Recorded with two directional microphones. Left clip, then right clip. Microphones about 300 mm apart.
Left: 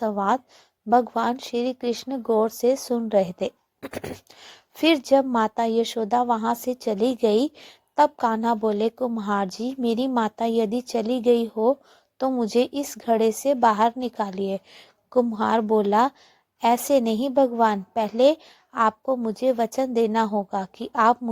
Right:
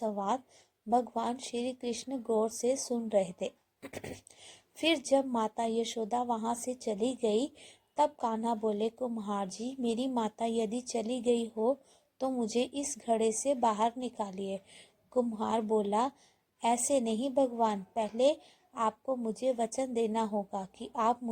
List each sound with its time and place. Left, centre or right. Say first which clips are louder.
0.0 s a woman's voice: left 10 dB; left